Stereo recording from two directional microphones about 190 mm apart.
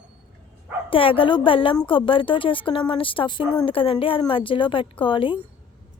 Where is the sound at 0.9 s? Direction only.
30° left (ahead or behind).